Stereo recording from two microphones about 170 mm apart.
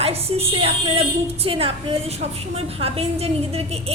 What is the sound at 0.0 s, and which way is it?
A woman's voice, 35° right (ahead or behind).